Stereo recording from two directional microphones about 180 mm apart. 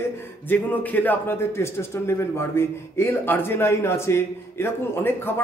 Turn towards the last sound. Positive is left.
turn(degrees=10)  # may be behind; listen again after turning